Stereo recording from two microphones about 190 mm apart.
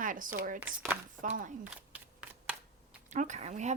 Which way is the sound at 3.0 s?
40° right (ahead or behind).